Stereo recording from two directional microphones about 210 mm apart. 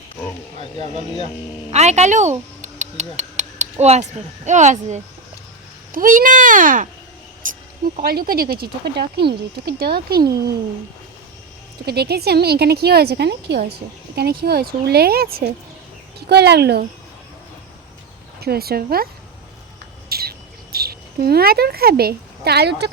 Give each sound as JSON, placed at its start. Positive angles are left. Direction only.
{"t": 1.7, "sound": "speech", "side_deg": -30}
{"t": 2.6, "sound": "a sound", "side_deg": -35}
{"t": 4.4, "sound": "speech", "side_deg": -35}
{"t": 7.4, "sound": "a sound", "side_deg": -40}
{"t": 7.9, "sound": "speech", "side_deg": -45}
{"t": 11.9, "sound": "speech", "side_deg": -50}
{"t": 18.3, "sound": "speech", "side_deg": -50}
{"t": 20.1, "sound": "bird", "side_deg": -45}
{"t": 20.7, "sound": "speech", "side_deg": -45}